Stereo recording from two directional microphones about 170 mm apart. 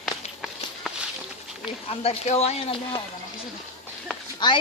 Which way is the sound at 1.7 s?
35° left (ahead or behind).